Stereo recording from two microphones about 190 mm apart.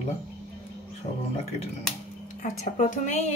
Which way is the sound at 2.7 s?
40° left (ahead or behind).